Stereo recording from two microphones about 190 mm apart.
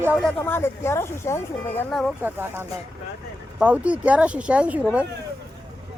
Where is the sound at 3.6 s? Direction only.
5° right (ahead or behind).